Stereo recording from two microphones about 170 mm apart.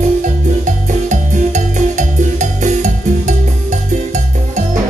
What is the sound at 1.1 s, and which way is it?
Music, 45° right (ahead or behind).